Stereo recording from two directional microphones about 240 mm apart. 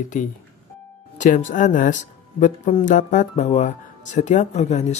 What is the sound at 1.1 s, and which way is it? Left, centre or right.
Speech, left.